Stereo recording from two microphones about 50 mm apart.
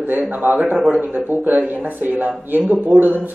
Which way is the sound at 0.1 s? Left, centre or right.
Right.